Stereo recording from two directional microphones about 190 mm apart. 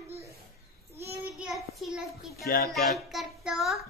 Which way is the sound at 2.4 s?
55° left (ahead or behind).